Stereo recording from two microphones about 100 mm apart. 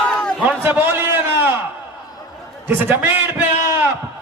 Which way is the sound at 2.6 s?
15° right (ahead or behind).